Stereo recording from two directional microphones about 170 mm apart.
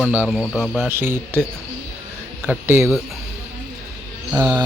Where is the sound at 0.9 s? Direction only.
15° right (ahead or behind).